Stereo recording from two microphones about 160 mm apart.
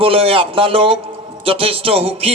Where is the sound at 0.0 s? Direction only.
35° right (ahead or behind).